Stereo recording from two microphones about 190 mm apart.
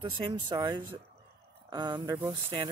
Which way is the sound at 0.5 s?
25° right (ahead or behind).